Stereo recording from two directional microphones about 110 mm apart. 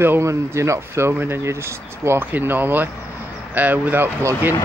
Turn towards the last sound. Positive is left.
turn(degrees=-15)  # may be behind; listen again after turning